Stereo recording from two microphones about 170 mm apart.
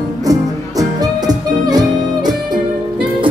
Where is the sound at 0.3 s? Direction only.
20° right (ahead or behind).